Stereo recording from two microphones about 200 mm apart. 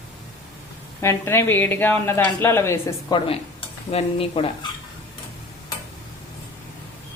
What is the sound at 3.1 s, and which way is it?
Stir, 20° left (ahead or behind).